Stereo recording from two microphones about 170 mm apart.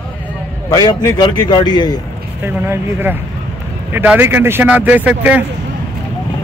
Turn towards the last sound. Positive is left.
turn(degrees=-10)  # may be behind; listen again after turning